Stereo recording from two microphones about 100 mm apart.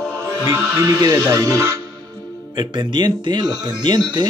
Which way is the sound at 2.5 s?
50° right (ahead or behind).